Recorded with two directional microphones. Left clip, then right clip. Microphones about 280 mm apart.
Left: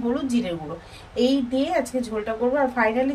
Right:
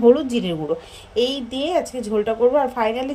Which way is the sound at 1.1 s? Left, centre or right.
Right.